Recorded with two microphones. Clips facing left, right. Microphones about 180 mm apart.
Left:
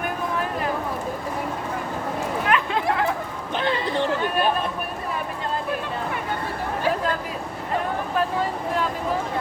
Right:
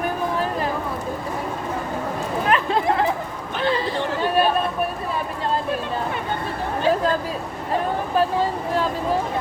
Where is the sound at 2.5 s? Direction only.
35° right (ahead or behind).